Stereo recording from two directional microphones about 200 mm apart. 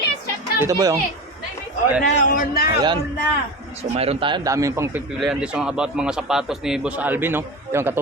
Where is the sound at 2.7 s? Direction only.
25° right (ahead or behind).